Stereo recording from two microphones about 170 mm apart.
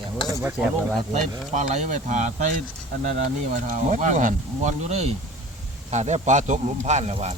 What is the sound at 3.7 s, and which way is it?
Speech, 45° right (ahead or behind).